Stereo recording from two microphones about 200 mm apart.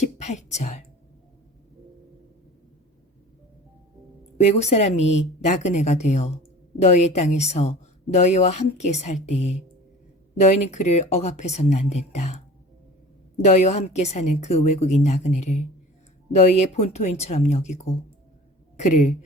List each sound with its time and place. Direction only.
0.0 s speech: 35° left (ahead or behind)
4.4 s a woman's voice: 35° left (ahead or behind)
13.4 s a woman's voice: 35° left (ahead or behind)